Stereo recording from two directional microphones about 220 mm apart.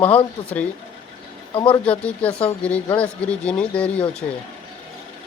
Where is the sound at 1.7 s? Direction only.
5° left (ahead or behind).